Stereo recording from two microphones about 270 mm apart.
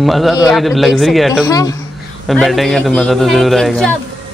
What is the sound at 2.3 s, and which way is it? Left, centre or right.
A man's voice, centre.